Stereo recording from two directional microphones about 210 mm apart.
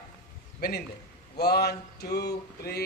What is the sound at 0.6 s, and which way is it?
Speech, 45° left (ahead or behind).